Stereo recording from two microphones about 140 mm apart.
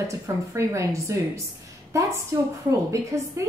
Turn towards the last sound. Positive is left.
turn(degrees=-20)  # may be behind; listen again after turning